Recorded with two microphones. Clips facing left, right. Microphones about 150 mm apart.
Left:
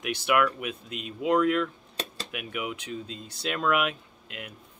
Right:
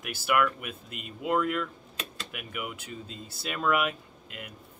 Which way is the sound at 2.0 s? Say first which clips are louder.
Left 5 dB; 35° left (ahead or behind).